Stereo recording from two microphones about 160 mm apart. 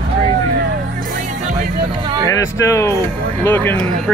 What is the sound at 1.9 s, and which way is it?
Music, 30° right (ahead or behind).